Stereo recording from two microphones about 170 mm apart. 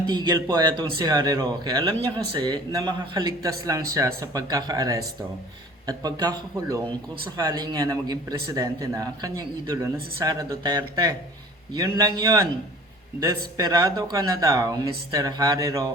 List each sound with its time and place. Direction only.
0.1 s speech: 25° right (ahead or behind)
13.6 s speech: 25° right (ahead or behind)